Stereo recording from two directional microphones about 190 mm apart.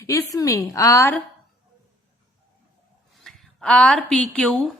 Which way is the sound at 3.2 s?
Centre (ahead or behind).